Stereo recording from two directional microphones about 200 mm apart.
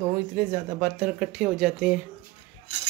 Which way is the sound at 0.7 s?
5° right (ahead or behind).